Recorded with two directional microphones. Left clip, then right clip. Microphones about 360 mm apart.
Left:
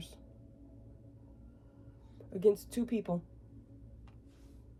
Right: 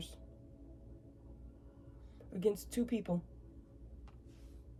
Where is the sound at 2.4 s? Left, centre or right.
Centre.